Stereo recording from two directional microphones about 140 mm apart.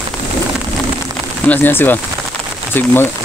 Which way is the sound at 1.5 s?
15° left (ahead or behind).